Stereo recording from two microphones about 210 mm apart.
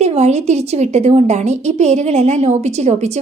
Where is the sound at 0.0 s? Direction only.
30° right (ahead or behind).